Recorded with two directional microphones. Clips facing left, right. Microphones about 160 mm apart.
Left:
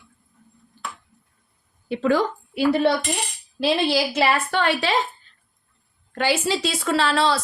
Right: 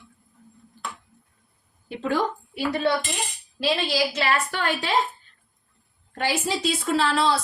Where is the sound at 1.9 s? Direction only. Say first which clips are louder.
Left 5 dB; 90° left.